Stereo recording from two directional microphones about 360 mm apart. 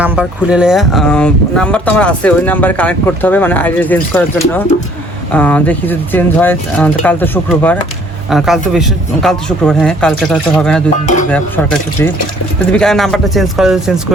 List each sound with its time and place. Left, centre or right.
0.0 s speech: centre
11.0 s speech: centre
11.3 s speech: centre